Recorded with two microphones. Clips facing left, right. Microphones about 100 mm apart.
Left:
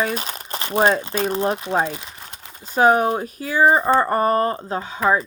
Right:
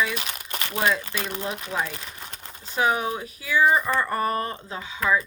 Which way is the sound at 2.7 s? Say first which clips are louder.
Left 8 dB; 45° left (ahead or behind).